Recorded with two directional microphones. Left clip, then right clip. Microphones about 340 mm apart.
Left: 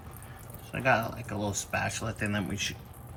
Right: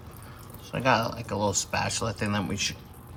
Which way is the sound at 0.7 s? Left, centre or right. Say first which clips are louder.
Right 2 dB; right.